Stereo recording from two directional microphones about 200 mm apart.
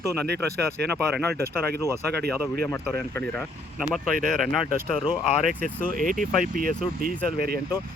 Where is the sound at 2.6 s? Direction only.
15° left (ahead or behind).